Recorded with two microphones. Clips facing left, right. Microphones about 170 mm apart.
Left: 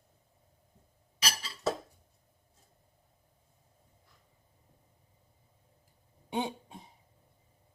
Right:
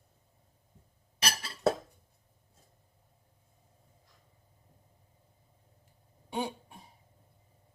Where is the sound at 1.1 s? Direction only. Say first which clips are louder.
Right 2 dB; 55° right (ahead or behind).